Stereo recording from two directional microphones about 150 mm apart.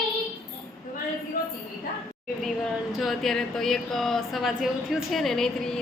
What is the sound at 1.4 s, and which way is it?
Speech, 75° left (ahead or behind).